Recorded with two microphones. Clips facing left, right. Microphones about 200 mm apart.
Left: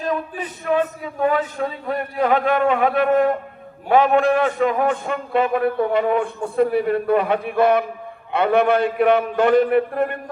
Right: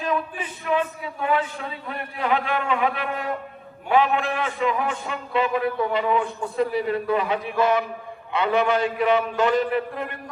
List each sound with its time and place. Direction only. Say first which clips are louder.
0.0 s a man's voice: left 2 dB; 40° left (ahead or behind)